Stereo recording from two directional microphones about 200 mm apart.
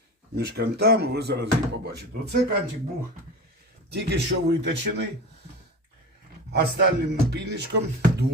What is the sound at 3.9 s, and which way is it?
Speech, 60° right (ahead or behind).